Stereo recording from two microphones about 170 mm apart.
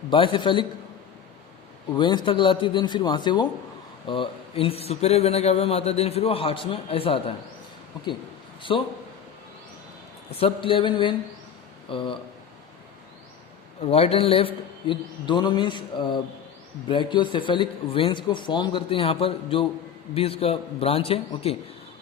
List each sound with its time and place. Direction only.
0.1 s speech: 30° left (ahead or behind)
2.0 s speech: 25° left (ahead or behind)
10.3 s speech: 35° left (ahead or behind)
13.8 s speech: 35° left (ahead or behind)